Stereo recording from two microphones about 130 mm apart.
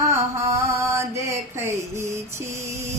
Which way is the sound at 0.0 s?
25° right (ahead or behind).